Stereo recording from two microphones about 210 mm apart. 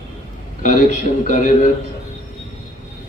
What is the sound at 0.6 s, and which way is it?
Speech, 40° left (ahead or behind).